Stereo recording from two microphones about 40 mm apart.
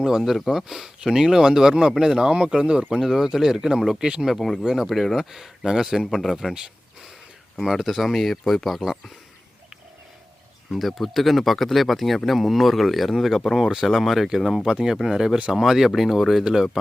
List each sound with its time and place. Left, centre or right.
0.2 s speech: centre; by 3.0 s right
3.0 s speech: centre
3.9 s speech: centre
4.2 s speech: centre
6.1 s speech: centre
7.6 s speech: centre
10.7 s speech: centre